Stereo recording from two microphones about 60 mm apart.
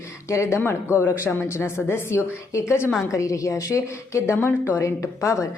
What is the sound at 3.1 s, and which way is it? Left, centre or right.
A woman's voice, left.